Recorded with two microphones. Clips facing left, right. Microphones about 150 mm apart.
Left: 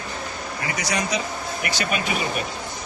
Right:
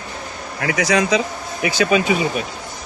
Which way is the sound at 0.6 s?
85° right.